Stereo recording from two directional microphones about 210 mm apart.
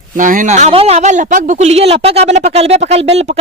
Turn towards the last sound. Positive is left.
turn(degrees=-30)  # may be behind; listen again after turning